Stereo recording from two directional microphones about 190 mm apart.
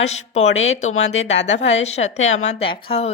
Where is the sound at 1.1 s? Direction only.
35° left (ahead or behind).